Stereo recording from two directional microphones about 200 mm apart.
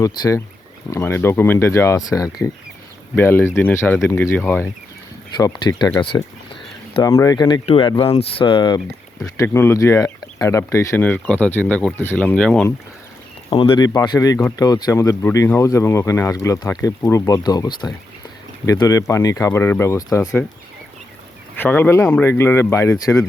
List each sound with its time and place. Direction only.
0.0 s speech: 15° left (ahead or behind)
5.4 s speech: 20° left (ahead or behind); by 12.6 s 5° left (ahead or behind)
13.5 s speech: 25° left (ahead or behind)
21.6 s speech: 10° left (ahead or behind)